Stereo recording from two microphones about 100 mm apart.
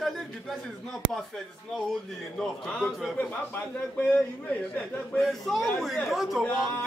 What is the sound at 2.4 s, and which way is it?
Speech, 10° left (ahead or behind).